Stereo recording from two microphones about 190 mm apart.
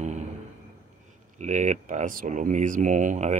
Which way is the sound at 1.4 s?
40° right (ahead or behind).